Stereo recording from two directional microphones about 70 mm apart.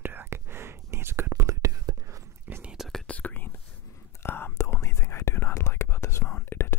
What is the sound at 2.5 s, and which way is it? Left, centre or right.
Whispering, right.